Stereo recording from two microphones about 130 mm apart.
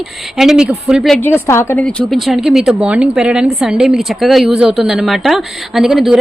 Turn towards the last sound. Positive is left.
turn(degrees=-5)  # may be behind; listen again after turning